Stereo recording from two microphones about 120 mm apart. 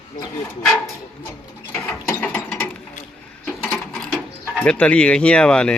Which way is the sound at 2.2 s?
15° left (ahead or behind).